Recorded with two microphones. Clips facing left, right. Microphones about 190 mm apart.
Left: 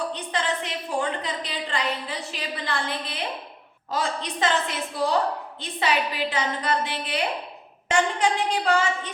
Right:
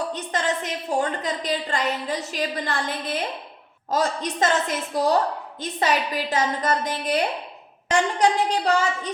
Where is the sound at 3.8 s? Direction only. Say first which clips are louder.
Right 4 dB; 45° right (ahead or behind).